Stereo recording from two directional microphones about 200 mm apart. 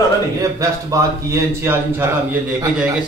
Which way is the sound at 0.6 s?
15° right (ahead or behind).